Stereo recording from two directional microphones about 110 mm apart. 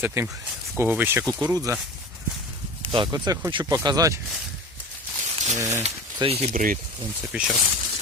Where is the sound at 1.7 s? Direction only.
30° right (ahead or behind).